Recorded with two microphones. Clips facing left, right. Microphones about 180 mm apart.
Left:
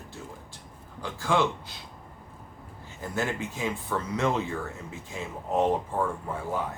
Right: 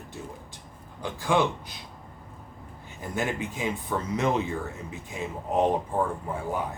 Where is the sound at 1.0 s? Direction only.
15° right (ahead or behind).